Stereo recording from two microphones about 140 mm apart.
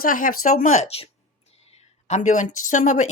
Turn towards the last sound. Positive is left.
turn(degrees=65)  # may be behind; listen again after turning